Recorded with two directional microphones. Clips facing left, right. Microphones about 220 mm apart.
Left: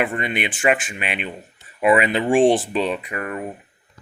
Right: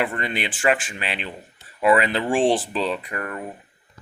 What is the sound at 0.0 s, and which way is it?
Speech, 20° left (ahead or behind).